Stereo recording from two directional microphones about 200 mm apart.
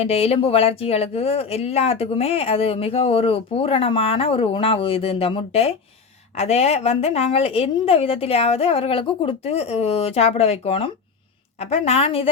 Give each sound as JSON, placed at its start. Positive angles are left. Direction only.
{"t": 0.0, "sound": "speech", "side_deg": 30}